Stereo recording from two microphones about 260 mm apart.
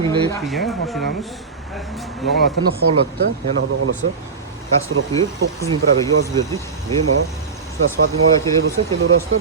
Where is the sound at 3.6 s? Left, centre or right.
Right.